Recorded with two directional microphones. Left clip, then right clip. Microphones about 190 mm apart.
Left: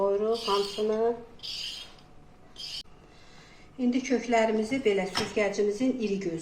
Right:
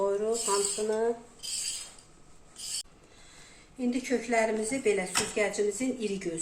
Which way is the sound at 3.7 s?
Centre (ahead or behind).